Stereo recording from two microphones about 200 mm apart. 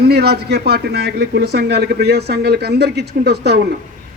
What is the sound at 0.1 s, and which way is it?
A man's voice, 55° right (ahead or behind).